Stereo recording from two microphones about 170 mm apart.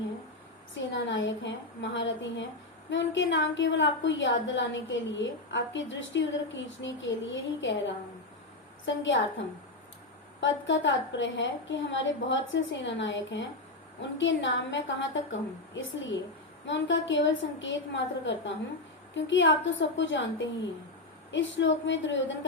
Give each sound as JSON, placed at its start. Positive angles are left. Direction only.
{"t": 0.7, "sound": "a woman's voice", "side_deg": 90}
{"t": 8.9, "sound": "a woman's voice", "side_deg": 90}
{"t": 10.4, "sound": "a woman's voice", "side_deg": 90}